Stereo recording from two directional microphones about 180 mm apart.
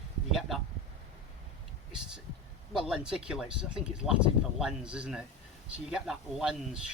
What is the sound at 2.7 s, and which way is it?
Speech, 5° right (ahead or behind).